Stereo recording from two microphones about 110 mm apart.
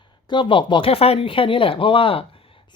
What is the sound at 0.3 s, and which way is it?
Speech, 45° left (ahead or behind).